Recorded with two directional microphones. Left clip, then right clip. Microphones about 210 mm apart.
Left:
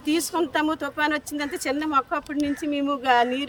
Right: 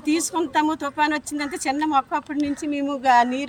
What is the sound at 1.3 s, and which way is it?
Speech, 5° left (ahead or behind).